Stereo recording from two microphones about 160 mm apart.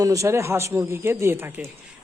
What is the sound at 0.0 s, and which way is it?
Speech, 20° right (ahead or behind).